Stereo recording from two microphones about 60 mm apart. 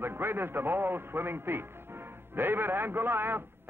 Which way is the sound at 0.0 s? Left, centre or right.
Right.